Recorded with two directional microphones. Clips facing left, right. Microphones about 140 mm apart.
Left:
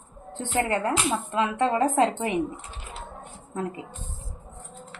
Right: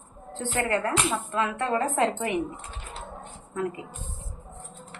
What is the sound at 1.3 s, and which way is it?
Speech, 20° left (ahead or behind).